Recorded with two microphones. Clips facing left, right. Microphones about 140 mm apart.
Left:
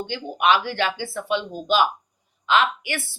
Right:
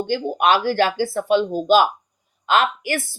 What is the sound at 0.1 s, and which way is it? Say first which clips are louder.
Speech: right 2 dB; 45° right (ahead or behind).